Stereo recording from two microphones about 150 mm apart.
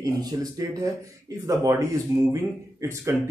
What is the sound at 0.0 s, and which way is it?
A man's voice, 25° right (ahead or behind).